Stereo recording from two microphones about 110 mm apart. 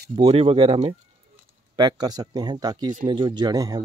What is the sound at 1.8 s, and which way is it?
Speech, 40° right (ahead or behind).